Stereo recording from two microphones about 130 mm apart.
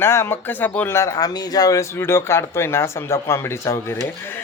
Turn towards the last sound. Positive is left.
turn(degrees=20)  # may be behind; listen again after turning